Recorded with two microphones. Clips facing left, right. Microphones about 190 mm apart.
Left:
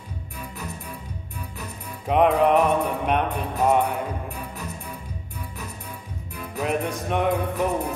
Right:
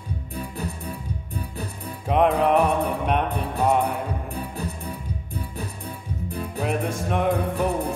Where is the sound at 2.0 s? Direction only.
Centre (ahead or behind).